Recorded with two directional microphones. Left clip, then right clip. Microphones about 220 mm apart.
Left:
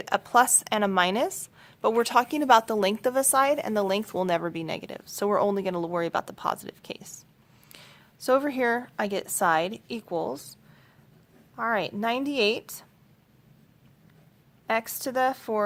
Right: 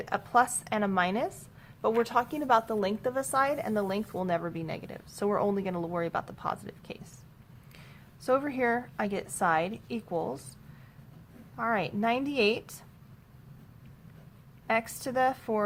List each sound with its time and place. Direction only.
0.0 s a woman's voice: 40° left (ahead or behind)
11.5 s a woman's voice: 30° left (ahead or behind)
14.7 s a woman's voice: 30° left (ahead or behind)